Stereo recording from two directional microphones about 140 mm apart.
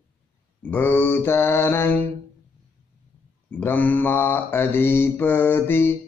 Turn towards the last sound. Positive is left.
turn(degrees=15)  # may be behind; listen again after turning